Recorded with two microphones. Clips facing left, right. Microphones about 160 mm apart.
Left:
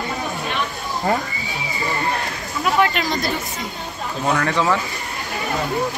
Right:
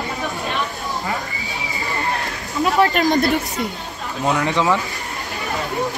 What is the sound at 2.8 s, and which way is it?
Speech, 45° right (ahead or behind).